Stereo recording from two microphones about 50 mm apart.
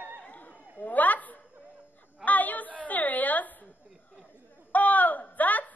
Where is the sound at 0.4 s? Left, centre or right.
Left.